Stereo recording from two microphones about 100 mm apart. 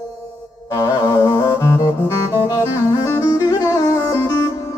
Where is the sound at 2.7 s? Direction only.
35° left (ahead or behind).